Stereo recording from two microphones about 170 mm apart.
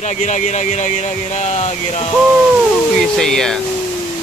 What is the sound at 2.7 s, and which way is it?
Speech, centre (ahead or behind).